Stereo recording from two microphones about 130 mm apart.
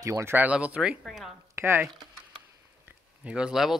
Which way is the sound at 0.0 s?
20° right (ahead or behind).